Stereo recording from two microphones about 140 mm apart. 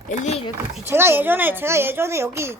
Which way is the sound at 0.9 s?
15° right (ahead or behind).